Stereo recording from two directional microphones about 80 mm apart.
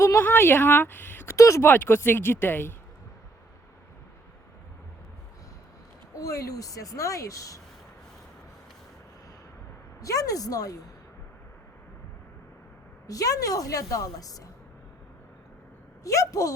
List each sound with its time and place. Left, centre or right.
0.2 s speech: left
1.6 s speech: left
6.1 s a woman's voice: left
10.0 s a woman's voice: left
13.1 s a woman's voice: left
16.0 s a woman's voice: left